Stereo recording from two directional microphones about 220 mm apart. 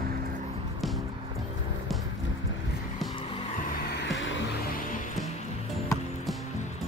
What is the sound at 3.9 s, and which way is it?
Music, 55° left (ahead or behind).